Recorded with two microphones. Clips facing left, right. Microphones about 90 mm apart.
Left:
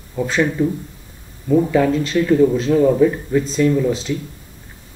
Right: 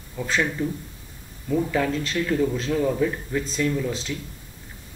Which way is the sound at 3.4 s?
Centre (ahead or behind).